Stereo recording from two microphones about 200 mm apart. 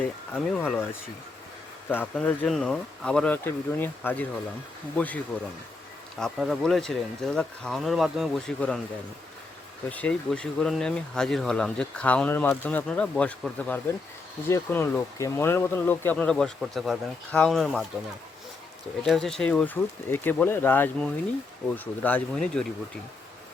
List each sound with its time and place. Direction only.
0.0 s speech: 5° left (ahead or behind)
1.9 s speech: 10° left (ahead or behind)
9.9 s speech: 5° left (ahead or behind)
19.0 s speech: centre (ahead or behind)